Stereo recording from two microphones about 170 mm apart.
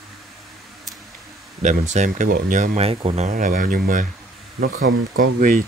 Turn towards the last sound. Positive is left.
turn(degrees=-55)  # may be behind; listen again after turning